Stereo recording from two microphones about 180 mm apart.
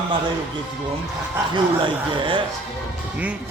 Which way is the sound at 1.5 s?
25° right (ahead or behind).